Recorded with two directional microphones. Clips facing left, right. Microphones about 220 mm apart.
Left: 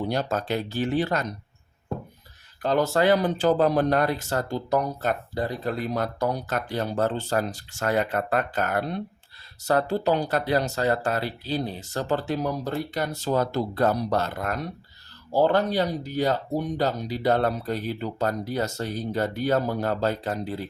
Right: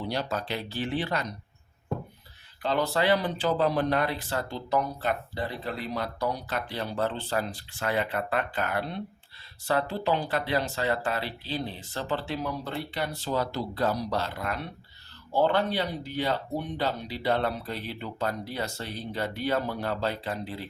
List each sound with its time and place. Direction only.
0.1 s speech: 45° left (ahead or behind)
2.6 s speech: 45° left (ahead or behind)